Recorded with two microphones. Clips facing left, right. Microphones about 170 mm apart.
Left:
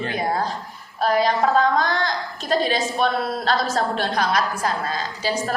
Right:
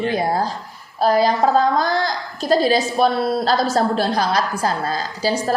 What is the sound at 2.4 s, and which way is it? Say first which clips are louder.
Speech: right 6 dB; 35° right (ahead or behind).